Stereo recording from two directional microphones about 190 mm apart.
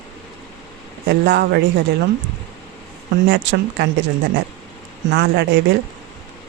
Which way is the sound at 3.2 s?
65° right (ahead or behind).